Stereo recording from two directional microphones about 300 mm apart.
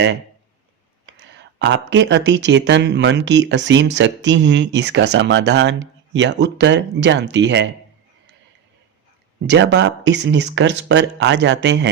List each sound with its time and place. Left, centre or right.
1.0 s speech: right
9.5 s speech: right